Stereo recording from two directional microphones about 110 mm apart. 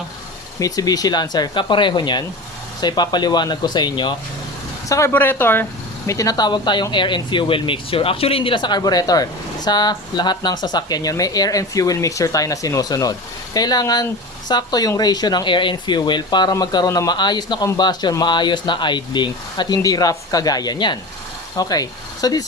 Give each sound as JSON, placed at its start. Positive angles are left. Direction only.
{"t": 0.6, "sound": "speech", "side_deg": 35}
{"t": 4.9, "sound": "speech", "side_deg": 25}
{"t": 6.1, "sound": "speech", "side_deg": 30}